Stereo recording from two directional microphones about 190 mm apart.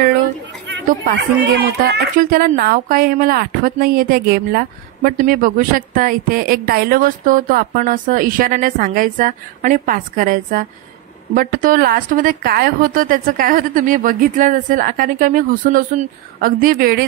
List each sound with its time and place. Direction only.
1.0 s a woman's voice: 65° right (ahead or behind)